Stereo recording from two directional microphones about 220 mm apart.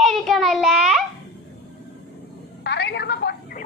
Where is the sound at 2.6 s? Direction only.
50° left (ahead or behind).